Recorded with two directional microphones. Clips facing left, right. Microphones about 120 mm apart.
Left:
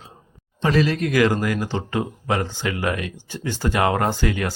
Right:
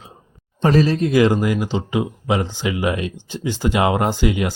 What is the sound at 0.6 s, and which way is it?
Speech, 35° right (ahead or behind).